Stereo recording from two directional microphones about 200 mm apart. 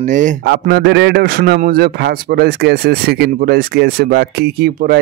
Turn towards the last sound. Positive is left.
turn(degrees=-50)  # may be behind; listen again after turning